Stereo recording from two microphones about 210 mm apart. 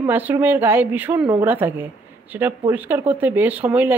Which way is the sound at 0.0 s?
10° right (ahead or behind).